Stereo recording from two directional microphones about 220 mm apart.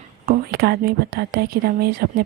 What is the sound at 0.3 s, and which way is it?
Speech, 45° right (ahead or behind).